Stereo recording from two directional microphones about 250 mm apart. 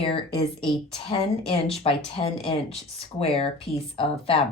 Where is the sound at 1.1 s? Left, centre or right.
Left.